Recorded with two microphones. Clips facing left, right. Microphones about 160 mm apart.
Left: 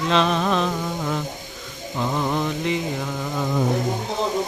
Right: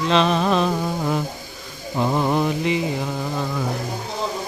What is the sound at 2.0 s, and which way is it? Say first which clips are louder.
Mantra: right 4 dB; 25° right (ahead or behind).